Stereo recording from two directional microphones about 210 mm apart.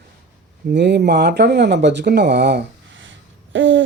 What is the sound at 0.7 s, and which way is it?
Speech, 50° right (ahead or behind).